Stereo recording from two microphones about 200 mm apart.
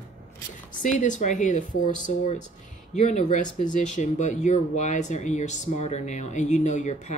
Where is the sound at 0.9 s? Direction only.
40° left (ahead or behind).